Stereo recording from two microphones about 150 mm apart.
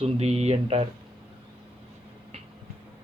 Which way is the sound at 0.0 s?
45° right (ahead or behind).